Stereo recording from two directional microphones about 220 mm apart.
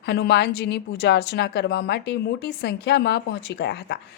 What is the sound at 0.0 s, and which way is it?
A woman's voice, 50° left (ahead or behind).